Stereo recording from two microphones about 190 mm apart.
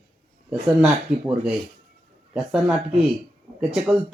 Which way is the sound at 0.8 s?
5° right (ahead or behind).